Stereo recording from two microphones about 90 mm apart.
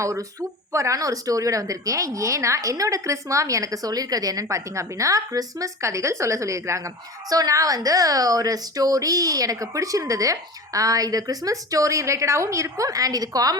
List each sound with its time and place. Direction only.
0.7 s a woman's voice: 35° right (ahead or behind)